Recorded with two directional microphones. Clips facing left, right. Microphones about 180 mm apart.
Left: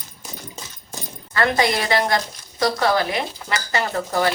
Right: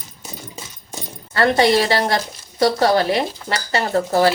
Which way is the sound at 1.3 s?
30° right (ahead or behind).